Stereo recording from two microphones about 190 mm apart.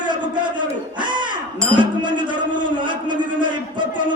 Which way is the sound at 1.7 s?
25° right (ahead or behind).